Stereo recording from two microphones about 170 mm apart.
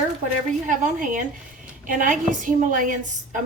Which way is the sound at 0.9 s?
50° right (ahead or behind).